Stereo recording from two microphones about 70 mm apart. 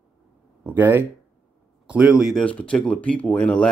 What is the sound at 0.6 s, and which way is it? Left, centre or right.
Speech, right.